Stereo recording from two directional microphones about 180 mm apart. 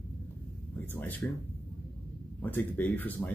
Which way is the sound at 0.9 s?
10° left (ahead or behind).